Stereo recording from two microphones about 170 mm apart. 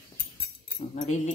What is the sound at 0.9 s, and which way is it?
Dog, 45° left (ahead or behind).